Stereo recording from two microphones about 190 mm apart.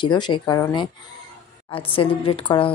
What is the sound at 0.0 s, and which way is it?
Speech, 25° left (ahead or behind).